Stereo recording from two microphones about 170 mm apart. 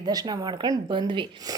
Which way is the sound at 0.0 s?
25° right (ahead or behind).